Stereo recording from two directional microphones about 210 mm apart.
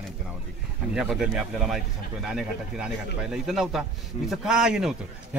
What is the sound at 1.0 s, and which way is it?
Speech, centre (ahead or behind).